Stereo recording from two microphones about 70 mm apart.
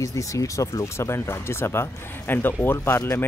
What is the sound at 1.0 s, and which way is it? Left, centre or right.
Speech, left.